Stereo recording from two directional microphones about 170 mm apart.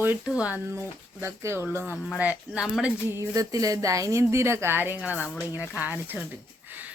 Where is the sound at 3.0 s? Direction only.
15° right (ahead or behind).